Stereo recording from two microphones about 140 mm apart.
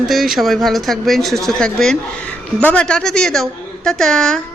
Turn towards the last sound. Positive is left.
turn(degrees=5)  # may be behind; listen again after turning